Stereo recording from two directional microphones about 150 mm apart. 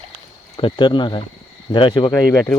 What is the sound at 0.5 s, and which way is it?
Speech, 35° left (ahead or behind).